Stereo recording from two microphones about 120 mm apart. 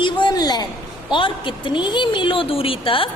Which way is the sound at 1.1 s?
45° left (ahead or behind).